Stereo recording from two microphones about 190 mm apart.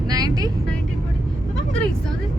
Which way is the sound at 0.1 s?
20° right (ahead or behind).